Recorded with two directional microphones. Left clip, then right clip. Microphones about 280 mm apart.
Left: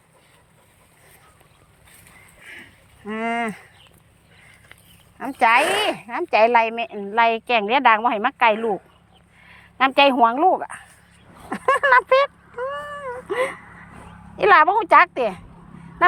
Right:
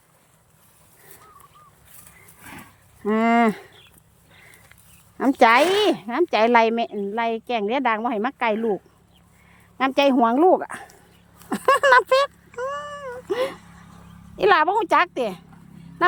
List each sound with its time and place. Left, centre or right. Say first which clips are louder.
3.0 s a woman's voice: right 6 dB; centre
5.1 s a woman's voice: right 1 dB; centre
11.4 s cat: right 1 dB; centre
14.3 s a woman's voice: left 3 dB; centre